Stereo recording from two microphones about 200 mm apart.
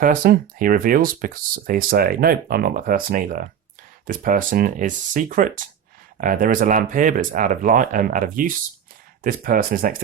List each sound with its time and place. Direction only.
0.0 s speech: 45° right (ahead or behind)